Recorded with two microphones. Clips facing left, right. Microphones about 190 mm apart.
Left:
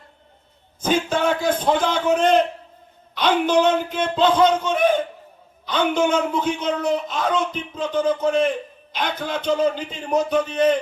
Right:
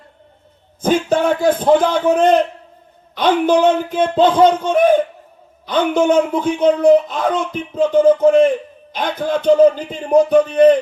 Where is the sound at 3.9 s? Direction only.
50° right (ahead or behind).